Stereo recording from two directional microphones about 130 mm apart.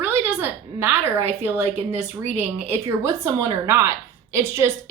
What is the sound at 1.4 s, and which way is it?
Speech, 15° right (ahead or behind).